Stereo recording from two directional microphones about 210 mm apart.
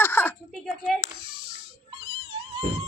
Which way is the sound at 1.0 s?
25° right (ahead or behind).